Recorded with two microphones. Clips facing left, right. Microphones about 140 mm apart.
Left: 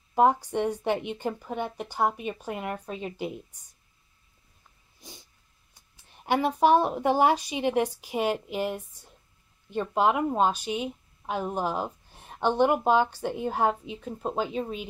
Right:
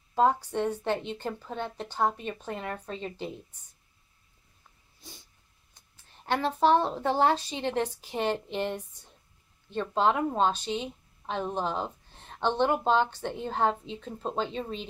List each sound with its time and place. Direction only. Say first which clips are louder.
0.1 s a woman's voice: left 3 dB; 15° left (ahead or behind)
5.0 s cat: left 2 dB; 15° left (ahead or behind)
5.8 s a woman's voice: left 2 dB; 15° left (ahead or behind)